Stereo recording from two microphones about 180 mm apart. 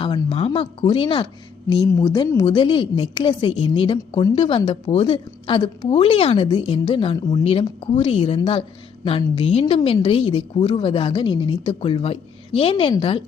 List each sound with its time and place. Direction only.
0.0 s a woman's voice: 30° left (ahead or behind)